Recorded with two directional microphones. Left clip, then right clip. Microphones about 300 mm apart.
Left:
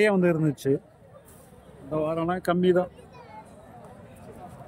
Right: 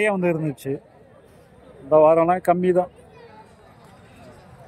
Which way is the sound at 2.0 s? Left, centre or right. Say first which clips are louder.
Right 12 dB; centre.